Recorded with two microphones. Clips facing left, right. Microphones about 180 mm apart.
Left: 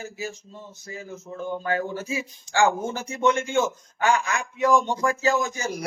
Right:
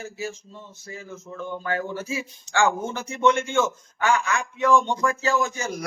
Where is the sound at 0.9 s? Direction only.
35° left (ahead or behind).